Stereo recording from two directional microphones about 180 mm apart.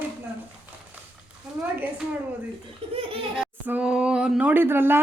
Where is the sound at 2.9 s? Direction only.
30° right (ahead or behind).